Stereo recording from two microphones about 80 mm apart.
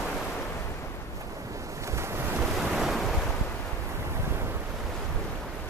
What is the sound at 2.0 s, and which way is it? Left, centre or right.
Waves, right.